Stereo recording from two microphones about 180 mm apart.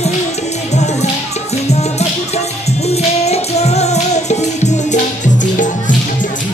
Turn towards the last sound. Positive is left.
turn(degrees=40)  # may be behind; listen again after turning